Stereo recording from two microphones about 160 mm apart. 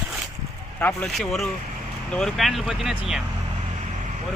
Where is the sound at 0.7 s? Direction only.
10° left (ahead or behind).